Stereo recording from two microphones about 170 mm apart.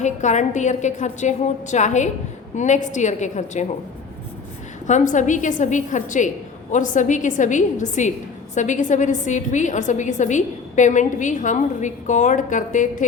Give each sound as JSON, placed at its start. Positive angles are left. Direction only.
{"t": 0.0, "sound": "a woman's voice", "side_deg": 45}
{"t": 4.9, "sound": "a woman's voice", "side_deg": 45}